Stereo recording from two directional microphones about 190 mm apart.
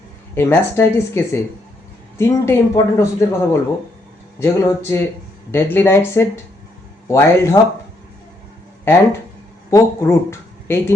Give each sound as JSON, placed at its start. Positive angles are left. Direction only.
{"t": 0.3, "sound": "a man's voice", "side_deg": 10}
{"t": 9.6, "sound": "speech", "side_deg": 15}